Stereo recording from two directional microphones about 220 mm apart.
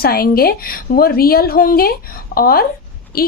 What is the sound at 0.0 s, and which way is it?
A woman's voice, 45° left (ahead or behind).